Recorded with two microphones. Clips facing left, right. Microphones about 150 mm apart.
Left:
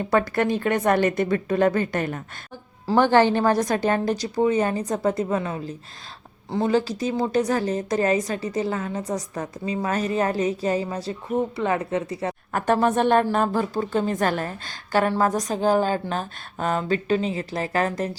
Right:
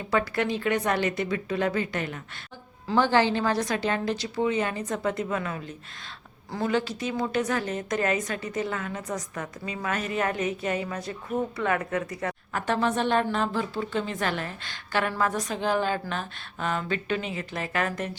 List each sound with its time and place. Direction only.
0.1 s a woman's voice: 45° left (ahead or behind); by 12.3 s 30° left (ahead or behind)
12.5 s a woman's voice: 45° left (ahead or behind)